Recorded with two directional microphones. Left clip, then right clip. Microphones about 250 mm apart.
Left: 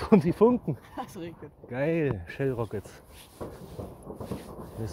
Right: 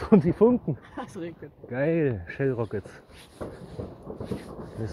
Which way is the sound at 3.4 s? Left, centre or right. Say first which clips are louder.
Right 2 dB; left.